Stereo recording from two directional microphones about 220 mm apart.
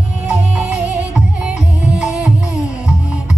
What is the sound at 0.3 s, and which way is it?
Music, 5° right (ahead or behind).